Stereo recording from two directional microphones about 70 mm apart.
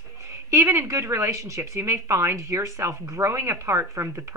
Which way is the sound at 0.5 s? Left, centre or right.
Right.